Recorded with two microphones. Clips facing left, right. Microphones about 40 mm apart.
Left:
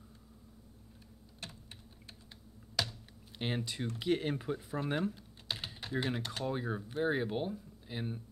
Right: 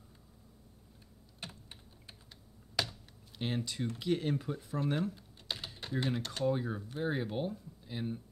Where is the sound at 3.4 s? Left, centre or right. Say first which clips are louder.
Right 1 dB; centre.